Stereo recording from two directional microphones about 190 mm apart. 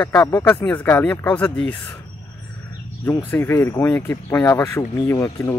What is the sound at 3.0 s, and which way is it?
Speech, 10° left (ahead or behind).